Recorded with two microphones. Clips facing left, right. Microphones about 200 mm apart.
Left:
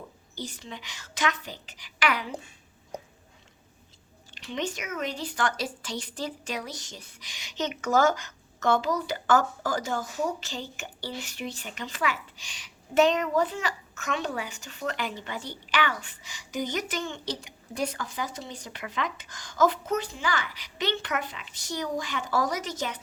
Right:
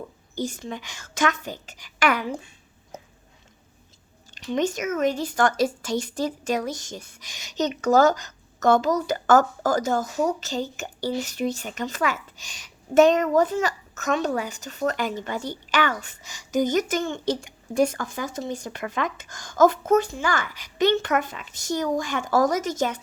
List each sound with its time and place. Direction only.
0.3 s speech: 45° right (ahead or behind)
4.4 s speech: 45° right (ahead or behind)